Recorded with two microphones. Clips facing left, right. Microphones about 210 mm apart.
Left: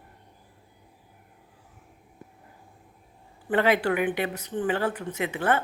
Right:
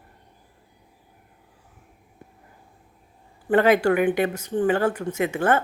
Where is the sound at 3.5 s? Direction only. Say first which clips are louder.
Right 5 dB; 45° right (ahead or behind).